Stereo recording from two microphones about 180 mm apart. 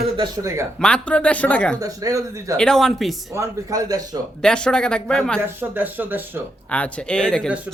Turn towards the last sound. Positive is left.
turn(degrees=-5)  # may be behind; listen again after turning